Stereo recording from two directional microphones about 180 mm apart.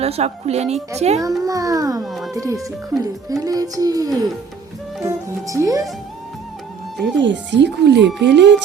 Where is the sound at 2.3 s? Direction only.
20° right (ahead or behind).